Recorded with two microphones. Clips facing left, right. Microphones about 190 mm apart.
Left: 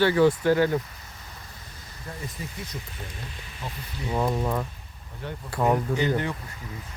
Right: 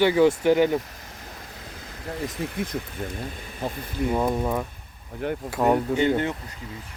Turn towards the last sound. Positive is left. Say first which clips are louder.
# right 3 dB
turn(degrees=-25)  # may be behind; listen again after turning